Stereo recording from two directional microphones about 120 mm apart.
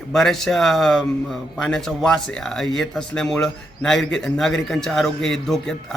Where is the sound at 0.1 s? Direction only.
5° left (ahead or behind).